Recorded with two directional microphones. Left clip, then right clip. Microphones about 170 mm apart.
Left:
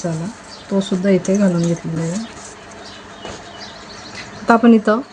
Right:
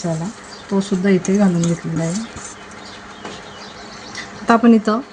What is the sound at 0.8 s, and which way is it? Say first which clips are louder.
Speech: left 1 dB; 20° right (ahead or behind).